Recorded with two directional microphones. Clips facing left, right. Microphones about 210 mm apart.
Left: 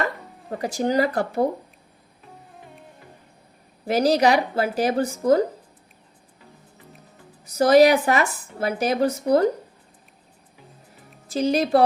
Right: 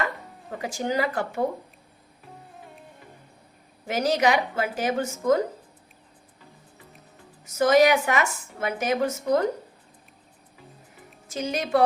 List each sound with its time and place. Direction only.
0.5 s speech: 35° left (ahead or behind)
2.5 s music: centre (ahead or behind)
3.8 s speech: 35° left (ahead or behind)
7.4 s speech: 35° left (ahead or behind)
11.3 s speech: 35° left (ahead or behind)